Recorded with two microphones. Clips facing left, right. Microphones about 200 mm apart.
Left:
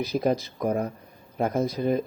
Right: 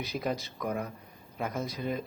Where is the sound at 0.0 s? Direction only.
40° left (ahead or behind).